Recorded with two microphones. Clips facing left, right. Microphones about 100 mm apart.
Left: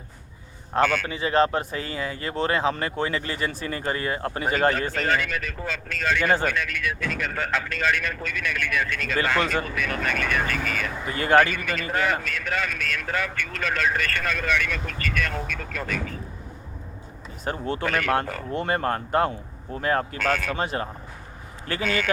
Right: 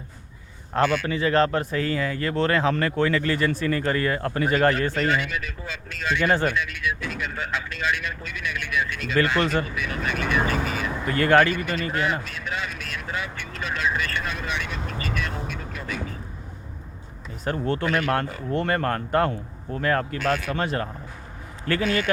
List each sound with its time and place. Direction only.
1.0 s speech: 15° left (ahead or behind)
4.9 s speech: 40° left (ahead or behind)
11.2 s speech: 10° left (ahead or behind)
11.5 s speech: 50° left (ahead or behind)
17.4 s speech: 15° left (ahead or behind)
17.8 s speech: 50° left (ahead or behind)
18.5 s speech: 15° left (ahead or behind)
20.1 s speech: 45° left (ahead or behind)
20.6 s speech: 15° left (ahead or behind)